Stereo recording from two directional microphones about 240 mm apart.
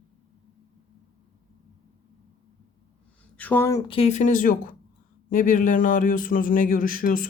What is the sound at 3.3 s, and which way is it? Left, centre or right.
A man's voice, centre.